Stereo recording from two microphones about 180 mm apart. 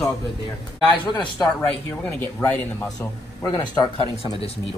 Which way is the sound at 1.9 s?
10° left (ahead or behind).